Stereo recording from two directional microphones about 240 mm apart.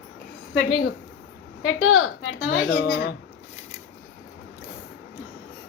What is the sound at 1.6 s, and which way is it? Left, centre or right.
A woman's voice, left.